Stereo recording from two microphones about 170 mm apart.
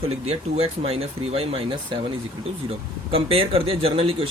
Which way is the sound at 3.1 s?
30° right (ahead or behind).